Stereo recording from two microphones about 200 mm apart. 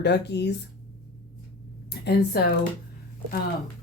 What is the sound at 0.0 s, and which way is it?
Speech, 60° left (ahead or behind).